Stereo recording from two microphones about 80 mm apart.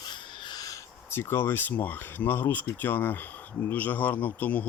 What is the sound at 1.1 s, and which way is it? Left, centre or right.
Speech, left.